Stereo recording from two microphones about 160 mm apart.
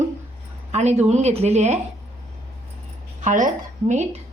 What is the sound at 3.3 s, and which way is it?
Speech, 50° right (ahead or behind).